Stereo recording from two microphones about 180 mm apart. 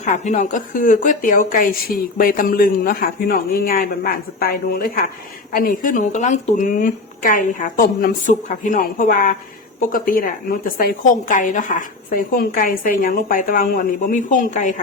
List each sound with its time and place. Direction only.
0.0 s a man's voice: 45° left (ahead or behind)